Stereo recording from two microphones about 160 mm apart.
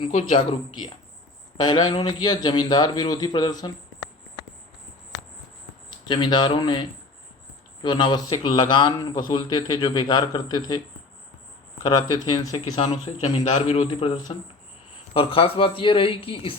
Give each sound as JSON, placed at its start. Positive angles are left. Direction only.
{"t": 0.3, "sound": "a man's voice", "side_deg": 30}
{"t": 5.9, "sound": "a man's voice", "side_deg": 25}
{"t": 11.8, "sound": "a man's voice", "side_deg": 25}
{"t": 13.1, "sound": "speech", "side_deg": 45}